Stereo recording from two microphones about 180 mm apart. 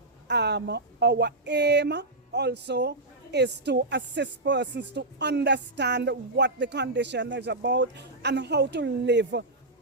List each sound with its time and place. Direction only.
0.3 s speech: 70° right (ahead or behind)